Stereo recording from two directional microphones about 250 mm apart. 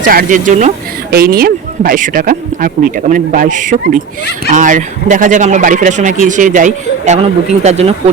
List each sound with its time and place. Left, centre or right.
0.0 s speech: right